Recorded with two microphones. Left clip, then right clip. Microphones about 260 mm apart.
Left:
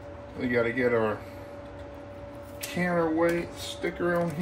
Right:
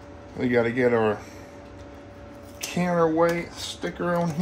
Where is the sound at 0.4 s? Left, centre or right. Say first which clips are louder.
Right 4 dB; right.